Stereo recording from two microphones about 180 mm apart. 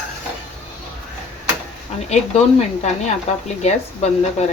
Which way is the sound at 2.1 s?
40° left (ahead or behind).